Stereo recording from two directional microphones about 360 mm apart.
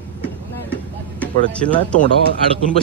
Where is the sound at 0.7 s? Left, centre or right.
Centre.